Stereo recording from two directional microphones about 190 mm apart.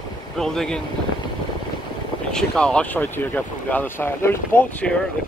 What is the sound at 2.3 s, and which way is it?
Speech, 5° left (ahead or behind).